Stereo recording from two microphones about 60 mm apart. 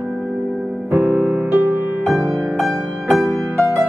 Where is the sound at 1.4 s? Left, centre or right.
Right.